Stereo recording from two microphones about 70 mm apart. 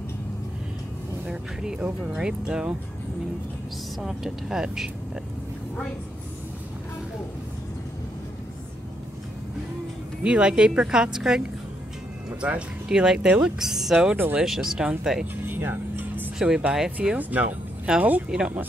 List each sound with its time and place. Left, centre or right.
1.2 s speech: centre
4.0 s speech: centre
10.2 s speech: centre
14.1 s speech: right
14.4 s speech: centre
15.4 s music: right
16.3 s speech: centre
17.2 s speech: right